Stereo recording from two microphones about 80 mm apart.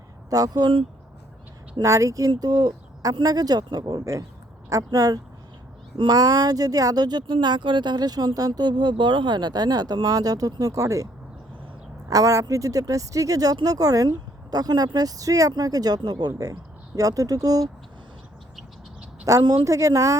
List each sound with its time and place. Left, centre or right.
0.3 s speech: right
1.8 s speech: right
2.4 s speech: right
19.2 s speech: right